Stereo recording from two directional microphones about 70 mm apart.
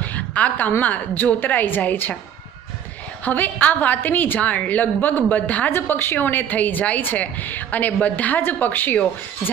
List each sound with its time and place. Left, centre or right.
0.0 s a woman's voice: left
3.3 s a woman's voice: left
5.7 s a woman's voice: left